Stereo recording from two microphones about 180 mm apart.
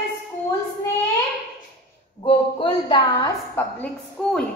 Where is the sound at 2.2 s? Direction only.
25° left (ahead or behind).